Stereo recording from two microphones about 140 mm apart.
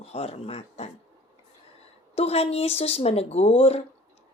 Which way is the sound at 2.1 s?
50° left (ahead or behind).